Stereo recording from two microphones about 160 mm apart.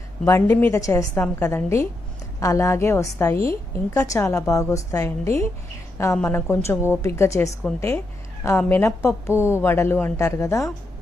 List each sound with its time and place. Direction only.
0.3 s a woman's voice: 15° left (ahead or behind)